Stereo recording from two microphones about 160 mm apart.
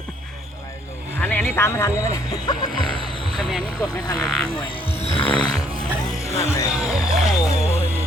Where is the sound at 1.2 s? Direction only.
10° left (ahead or behind).